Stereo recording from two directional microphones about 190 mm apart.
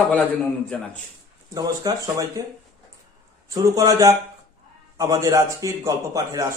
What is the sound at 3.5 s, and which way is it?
A man's voice, 20° right (ahead or behind).